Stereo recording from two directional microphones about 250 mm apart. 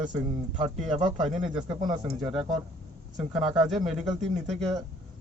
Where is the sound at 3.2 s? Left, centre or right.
Centre.